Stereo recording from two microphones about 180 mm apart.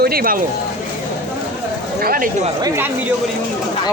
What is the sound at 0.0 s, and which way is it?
Speech, 55° right (ahead or behind).